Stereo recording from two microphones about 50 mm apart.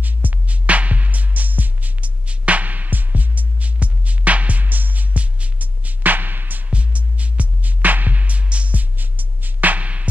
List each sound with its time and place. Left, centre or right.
0.0 s music: right
6.7 s music: right